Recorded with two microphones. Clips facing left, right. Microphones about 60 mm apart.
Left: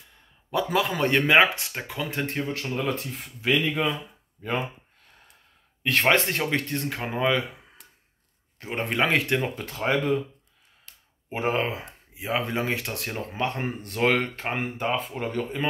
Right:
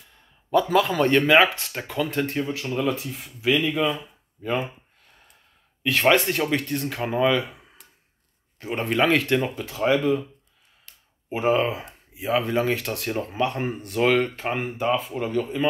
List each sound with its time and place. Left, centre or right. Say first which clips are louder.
0.5 s speech: right 5 dB; centre
2.2 s speech: right 2 dB; left
5.8 s speech: right 2 dB; left
8.5 s speech: right 3 dB; left
9.6 s speech: right 4 dB; left
11.2 s speech: right 4 dB; left
11.8 s speech: right 5 dB; left
13.3 s speech: right 1 dB; left